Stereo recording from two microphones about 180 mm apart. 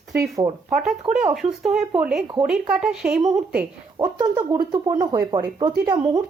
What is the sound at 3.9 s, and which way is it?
Speech, 25° right (ahead or behind).